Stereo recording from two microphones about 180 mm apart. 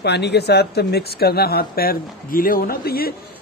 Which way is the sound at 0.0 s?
70° left (ahead or behind).